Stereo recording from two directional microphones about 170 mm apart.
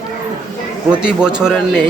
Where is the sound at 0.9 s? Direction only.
5° right (ahead or behind).